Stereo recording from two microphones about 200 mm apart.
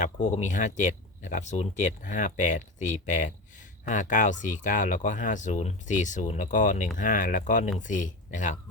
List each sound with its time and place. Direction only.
0.0 s speech: 35° left (ahead or behind)